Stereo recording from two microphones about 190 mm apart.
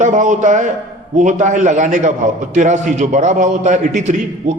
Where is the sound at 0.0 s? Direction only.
40° right (ahead or behind).